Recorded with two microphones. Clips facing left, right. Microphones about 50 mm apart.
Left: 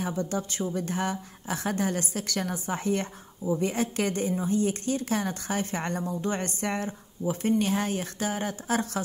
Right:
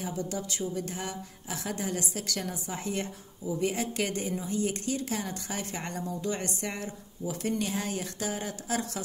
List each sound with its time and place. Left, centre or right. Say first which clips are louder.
0.0 s a woman's voice: left 4 dB; left